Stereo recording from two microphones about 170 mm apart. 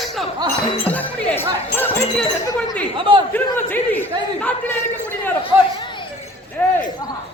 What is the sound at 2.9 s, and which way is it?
Speech, 30° right (ahead or behind).